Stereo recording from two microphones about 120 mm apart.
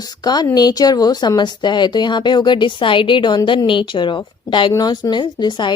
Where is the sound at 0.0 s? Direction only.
35° left (ahead or behind).